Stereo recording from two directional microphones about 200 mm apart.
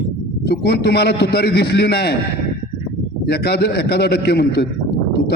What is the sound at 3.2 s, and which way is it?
A man's voice, 55° left (ahead or behind).